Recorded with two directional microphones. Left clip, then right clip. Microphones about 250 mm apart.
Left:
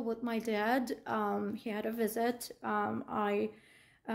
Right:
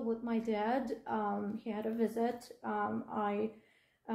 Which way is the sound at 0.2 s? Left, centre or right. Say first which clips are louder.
Left 1 dB; left.